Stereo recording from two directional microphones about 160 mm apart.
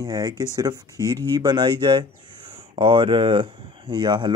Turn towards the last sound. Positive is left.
turn(degrees=-30)  # may be behind; listen again after turning